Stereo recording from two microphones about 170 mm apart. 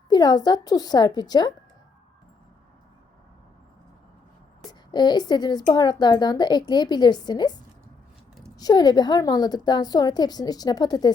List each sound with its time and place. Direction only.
0.1 s speech: 25° left (ahead or behind)
4.9 s speech: 25° left (ahead or behind)
8.5 s speech: 20° left (ahead or behind)